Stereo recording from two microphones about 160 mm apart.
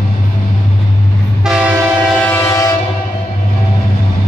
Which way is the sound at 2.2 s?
15° left (ahead or behind).